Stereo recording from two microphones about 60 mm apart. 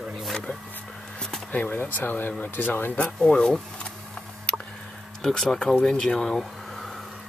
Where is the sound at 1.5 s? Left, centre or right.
Left.